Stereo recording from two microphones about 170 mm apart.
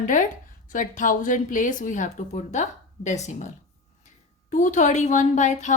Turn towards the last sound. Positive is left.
turn(degrees=45)  # may be behind; listen again after turning